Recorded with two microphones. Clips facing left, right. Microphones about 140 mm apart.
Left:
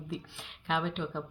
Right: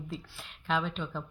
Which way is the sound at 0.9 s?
20° left (ahead or behind).